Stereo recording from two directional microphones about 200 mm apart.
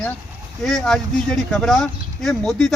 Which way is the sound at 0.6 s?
Centre (ahead or behind).